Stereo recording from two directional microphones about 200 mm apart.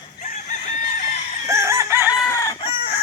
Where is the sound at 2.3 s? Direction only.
15° left (ahead or behind).